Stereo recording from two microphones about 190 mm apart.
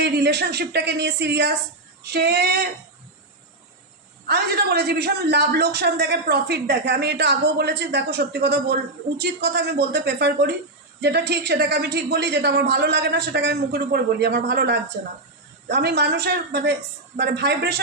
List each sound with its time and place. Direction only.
0.0 s a man's voice: 60° right (ahead or behind)
4.3 s a man's voice: 60° right (ahead or behind)